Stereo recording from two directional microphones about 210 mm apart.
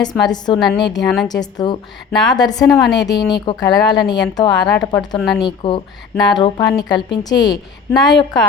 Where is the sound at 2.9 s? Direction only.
20° left (ahead or behind).